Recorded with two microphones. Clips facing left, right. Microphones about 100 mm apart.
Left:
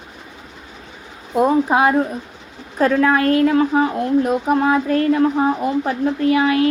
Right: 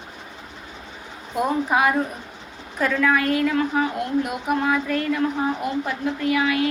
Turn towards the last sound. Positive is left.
turn(degrees=30)  # may be behind; listen again after turning